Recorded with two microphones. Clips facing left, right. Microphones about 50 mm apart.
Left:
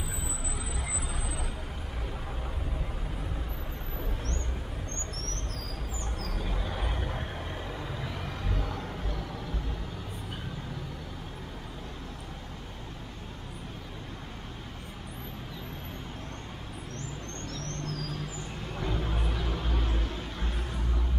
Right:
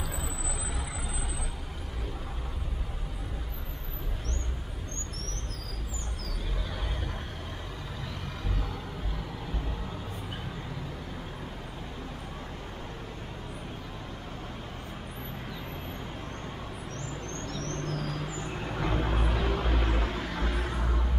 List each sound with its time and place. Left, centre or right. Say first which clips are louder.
6.7 s vehicle: left 2 dB; left
17.6 s vehicle: right 3 dB; right
20.1 s vehicle: right 5 dB; right
20.7 s music: right 3 dB; right